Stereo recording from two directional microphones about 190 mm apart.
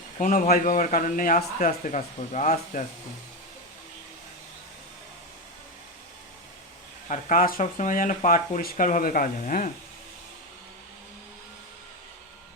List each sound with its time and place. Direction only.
0.2 s speech: 45° left (ahead or behind)
7.1 s speech: 45° left (ahead or behind)